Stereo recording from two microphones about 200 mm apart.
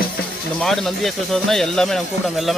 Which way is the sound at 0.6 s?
Centre (ahead or behind).